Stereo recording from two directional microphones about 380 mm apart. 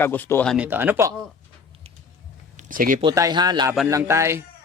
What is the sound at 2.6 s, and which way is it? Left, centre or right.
Speech, right.